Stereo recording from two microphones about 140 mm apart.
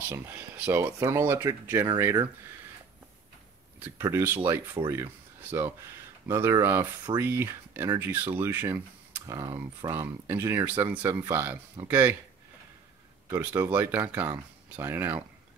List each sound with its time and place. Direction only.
0.7 s speech: 20° right (ahead or behind)
3.8 s speech: 15° right (ahead or behind); by 9.9 s 30° right (ahead or behind)
9.9 s speech: 15° right (ahead or behind)
13.3 s speech: 10° right (ahead or behind)